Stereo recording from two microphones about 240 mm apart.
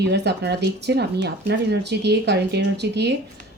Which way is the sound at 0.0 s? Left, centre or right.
Right.